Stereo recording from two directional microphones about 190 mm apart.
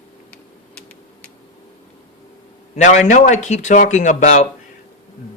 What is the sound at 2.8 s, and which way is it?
A woman's voice, 40° left (ahead or behind).